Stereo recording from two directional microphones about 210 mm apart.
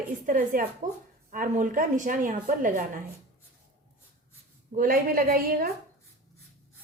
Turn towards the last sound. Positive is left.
turn(degrees=-45)  # may be behind; listen again after turning